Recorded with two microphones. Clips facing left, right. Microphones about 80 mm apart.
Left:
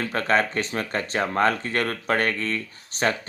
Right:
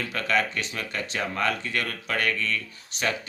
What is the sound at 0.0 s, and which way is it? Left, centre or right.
Speech, left.